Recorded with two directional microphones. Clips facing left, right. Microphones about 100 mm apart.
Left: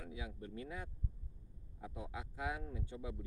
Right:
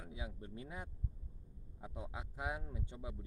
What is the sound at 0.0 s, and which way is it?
Speech, 25° right (ahead or behind).